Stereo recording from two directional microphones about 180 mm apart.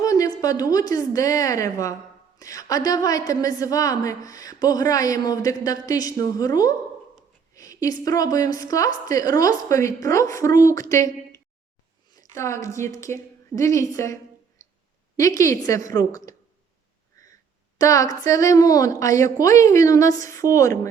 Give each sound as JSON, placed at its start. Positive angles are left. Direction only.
{"t": 0.0, "sound": "a woman's voice", "side_deg": 20}
{"t": 17.7, "sound": "a woman's voice", "side_deg": 20}